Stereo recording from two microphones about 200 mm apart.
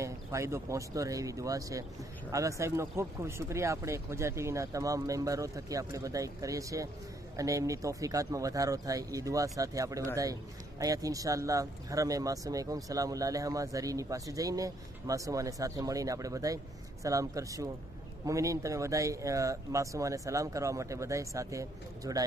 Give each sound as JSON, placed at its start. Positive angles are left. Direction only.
{"t": 0.0, "sound": "speech", "side_deg": -15}